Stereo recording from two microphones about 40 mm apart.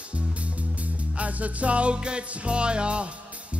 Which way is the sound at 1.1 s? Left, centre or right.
Right.